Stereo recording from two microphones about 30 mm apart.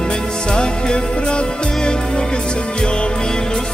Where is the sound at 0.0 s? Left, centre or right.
Left.